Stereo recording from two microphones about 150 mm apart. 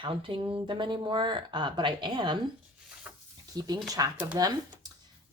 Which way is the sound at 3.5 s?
25° right (ahead or behind).